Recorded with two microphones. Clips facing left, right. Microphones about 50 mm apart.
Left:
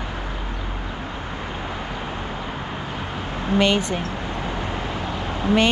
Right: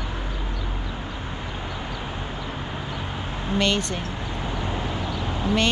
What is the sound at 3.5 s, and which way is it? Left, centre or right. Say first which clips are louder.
Speech: left 4 dB; centre.